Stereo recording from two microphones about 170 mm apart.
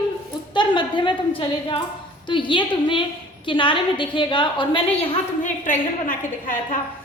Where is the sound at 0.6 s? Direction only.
30° left (ahead or behind).